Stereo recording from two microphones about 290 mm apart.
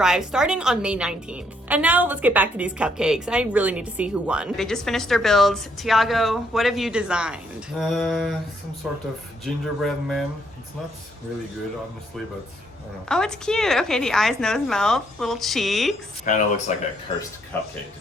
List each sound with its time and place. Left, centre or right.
0.0 s a woman's voice: centre
13.1 s a woman's voice: centre
16.2 s speech: left